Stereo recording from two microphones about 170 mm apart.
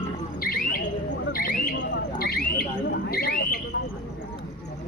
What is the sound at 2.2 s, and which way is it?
Alarm, 65° left (ahead or behind).